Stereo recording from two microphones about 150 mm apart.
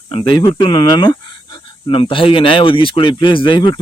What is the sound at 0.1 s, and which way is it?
Speech, 35° left (ahead or behind).